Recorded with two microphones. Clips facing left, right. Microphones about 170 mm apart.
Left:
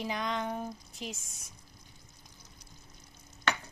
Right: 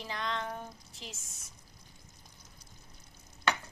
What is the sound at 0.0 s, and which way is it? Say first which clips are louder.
Speech: left 3 dB; 15° left (ahead or behind).